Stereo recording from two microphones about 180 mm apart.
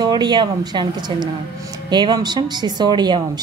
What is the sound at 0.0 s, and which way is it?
A woman's voice, 25° right (ahead or behind).